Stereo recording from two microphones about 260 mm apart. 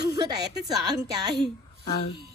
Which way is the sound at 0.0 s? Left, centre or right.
Centre.